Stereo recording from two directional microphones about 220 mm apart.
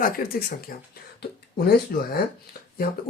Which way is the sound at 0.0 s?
40° left (ahead or behind).